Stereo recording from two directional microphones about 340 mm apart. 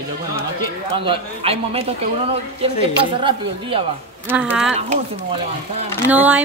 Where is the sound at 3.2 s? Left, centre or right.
Centre.